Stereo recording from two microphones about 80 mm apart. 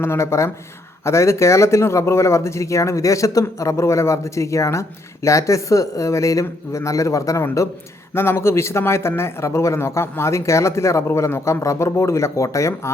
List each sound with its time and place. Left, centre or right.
0.0 s speech: left